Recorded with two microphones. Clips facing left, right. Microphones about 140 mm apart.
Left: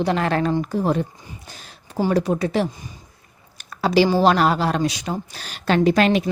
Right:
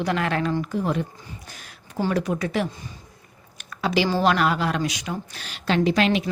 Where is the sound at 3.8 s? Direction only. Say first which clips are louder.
Left 5 dB; 35° left (ahead or behind).